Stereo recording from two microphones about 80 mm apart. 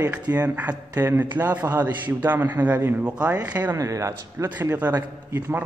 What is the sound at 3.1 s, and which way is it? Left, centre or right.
Speech, centre.